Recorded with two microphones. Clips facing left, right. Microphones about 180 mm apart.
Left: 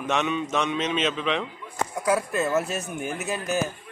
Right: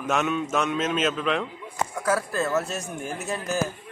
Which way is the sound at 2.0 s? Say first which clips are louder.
Left 2 dB; 15° left (ahead or behind).